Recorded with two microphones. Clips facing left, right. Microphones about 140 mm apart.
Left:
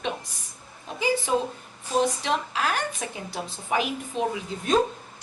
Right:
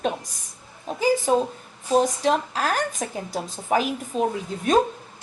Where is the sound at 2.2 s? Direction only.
40° right (ahead or behind).